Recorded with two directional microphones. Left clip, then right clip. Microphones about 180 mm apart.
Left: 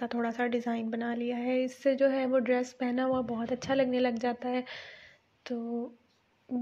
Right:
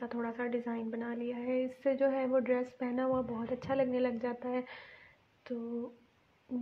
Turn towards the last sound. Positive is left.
turn(degrees=15)  # may be behind; listen again after turning